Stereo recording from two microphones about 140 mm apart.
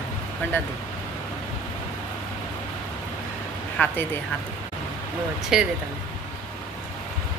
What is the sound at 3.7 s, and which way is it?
Speech, 15° left (ahead or behind).